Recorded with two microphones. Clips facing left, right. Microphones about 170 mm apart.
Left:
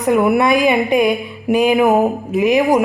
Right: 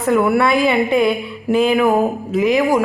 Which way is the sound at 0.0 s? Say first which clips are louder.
Left 1 dB; 20° left (ahead or behind).